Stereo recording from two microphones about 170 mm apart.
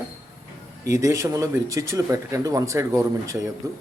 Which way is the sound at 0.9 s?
20° right (ahead or behind).